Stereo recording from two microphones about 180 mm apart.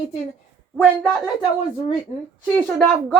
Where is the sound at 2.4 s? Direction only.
5° left (ahead or behind).